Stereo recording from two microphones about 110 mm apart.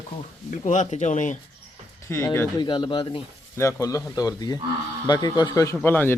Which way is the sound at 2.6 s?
45° left (ahead or behind).